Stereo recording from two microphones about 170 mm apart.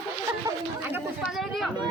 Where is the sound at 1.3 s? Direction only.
Centre (ahead or behind).